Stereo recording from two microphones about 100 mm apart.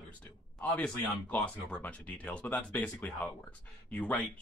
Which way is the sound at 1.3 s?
15° left (ahead or behind).